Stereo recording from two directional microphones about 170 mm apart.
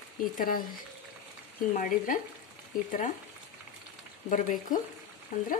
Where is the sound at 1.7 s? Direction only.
50° left (ahead or behind).